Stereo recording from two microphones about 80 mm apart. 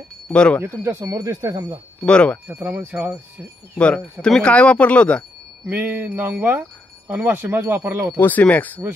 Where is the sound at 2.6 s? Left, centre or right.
Right.